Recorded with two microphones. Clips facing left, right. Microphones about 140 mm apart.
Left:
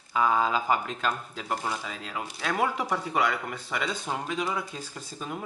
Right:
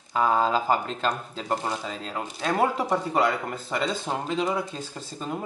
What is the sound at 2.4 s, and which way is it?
Speech, 35° right (ahead or behind).